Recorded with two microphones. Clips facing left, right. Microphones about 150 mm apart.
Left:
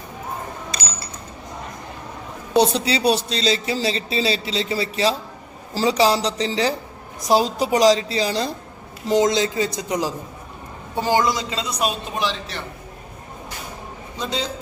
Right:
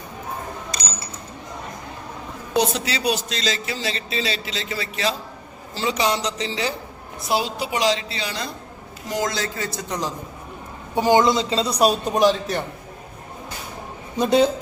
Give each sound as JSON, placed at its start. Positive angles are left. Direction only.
{"t": 2.6, "sound": "a man's voice", "side_deg": 30}
{"t": 9.0, "sound": "a man's voice", "side_deg": 25}
{"t": 10.9, "sound": "a man's voice", "side_deg": -15}
{"t": 14.2, "sound": "speech", "side_deg": -55}